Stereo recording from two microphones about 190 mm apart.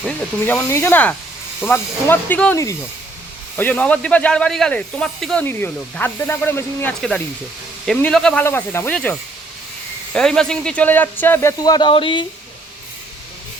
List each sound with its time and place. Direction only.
0.0 s speech: 10° left (ahead or behind)
10.2 s speech: 5° left (ahead or behind); by 12.2 s 25° left (ahead or behind)